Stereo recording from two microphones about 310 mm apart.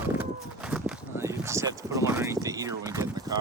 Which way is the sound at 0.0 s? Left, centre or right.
Centre.